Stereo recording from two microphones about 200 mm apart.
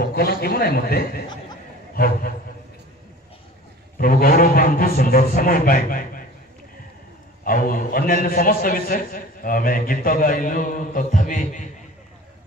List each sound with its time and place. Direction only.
0.0 s a man's voice: 50° left (ahead or behind)
4.0 s a man's voice: 45° left (ahead or behind)
7.4 s a man's voice: 45° left (ahead or behind)